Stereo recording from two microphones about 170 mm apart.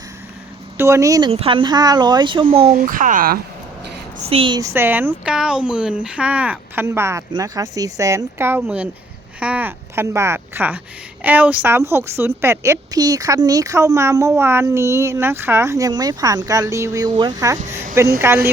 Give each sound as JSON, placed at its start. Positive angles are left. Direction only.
{"t": 0.8, "sound": "a woman's voice", "side_deg": -15}
{"t": 1.3, "sound": "speech", "side_deg": -35}
{"t": 2.6, "sound": "speech", "side_deg": -55}
{"t": 4.3, "sound": "speech", "side_deg": -30}
{"t": 4.7, "sound": "a woman's voice", "side_deg": -10}